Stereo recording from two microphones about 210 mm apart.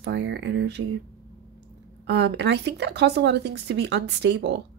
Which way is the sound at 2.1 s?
55° right (ahead or behind).